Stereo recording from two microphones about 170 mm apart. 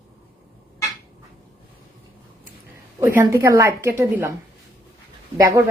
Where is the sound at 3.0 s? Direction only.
15° right (ahead or behind).